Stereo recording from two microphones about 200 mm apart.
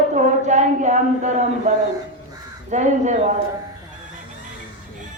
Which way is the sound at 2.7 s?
35° right (ahead or behind).